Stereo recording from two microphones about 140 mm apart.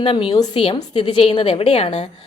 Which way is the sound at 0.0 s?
40° left (ahead or behind).